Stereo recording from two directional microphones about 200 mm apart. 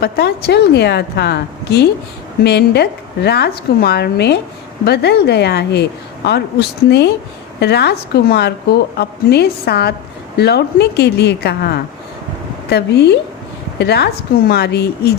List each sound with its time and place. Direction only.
0.0 s a woman's voice: 55° left (ahead or behind)